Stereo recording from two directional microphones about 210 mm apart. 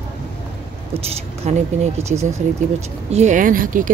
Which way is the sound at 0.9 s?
30° right (ahead or behind).